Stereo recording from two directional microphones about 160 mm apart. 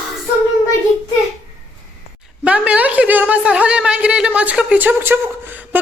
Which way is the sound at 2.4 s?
10° right (ahead or behind).